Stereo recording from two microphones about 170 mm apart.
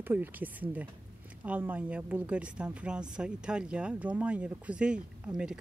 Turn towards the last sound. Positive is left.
turn(degrees=-5)  # may be behind; listen again after turning